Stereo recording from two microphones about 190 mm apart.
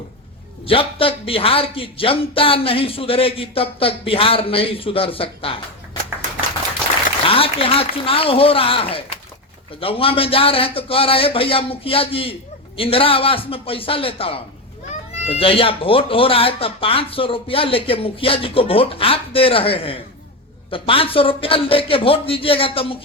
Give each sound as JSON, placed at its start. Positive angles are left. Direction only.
{"t": 0.7, "sound": "speech", "side_deg": 30}
{"t": 7.3, "sound": "speech", "side_deg": 30}